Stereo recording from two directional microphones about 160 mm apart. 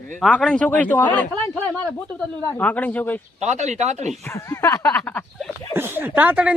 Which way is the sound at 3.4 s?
45° right (ahead or behind).